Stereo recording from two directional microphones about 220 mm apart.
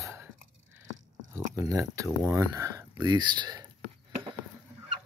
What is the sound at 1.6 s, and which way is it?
Speech, 15° right (ahead or behind).